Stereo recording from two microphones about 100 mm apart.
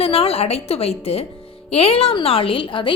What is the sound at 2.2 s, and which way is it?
Speech, 65° left (ahead or behind).